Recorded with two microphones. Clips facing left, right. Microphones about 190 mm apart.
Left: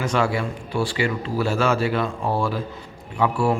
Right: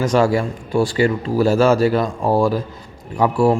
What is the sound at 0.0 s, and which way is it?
A man's voice, 40° right (ahead or behind).